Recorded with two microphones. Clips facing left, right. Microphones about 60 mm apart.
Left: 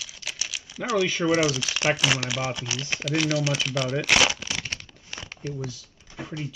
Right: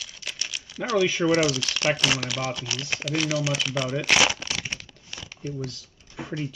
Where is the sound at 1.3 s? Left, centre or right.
Centre.